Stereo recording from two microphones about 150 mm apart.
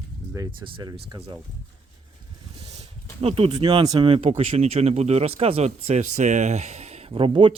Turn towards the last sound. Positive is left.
turn(degrees=-35)  # may be behind; listen again after turning